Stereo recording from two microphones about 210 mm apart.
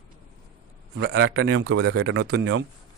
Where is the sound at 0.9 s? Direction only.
65° right (ahead or behind).